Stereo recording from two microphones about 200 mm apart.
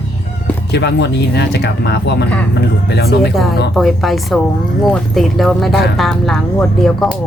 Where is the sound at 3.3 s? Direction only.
Centre (ahead or behind).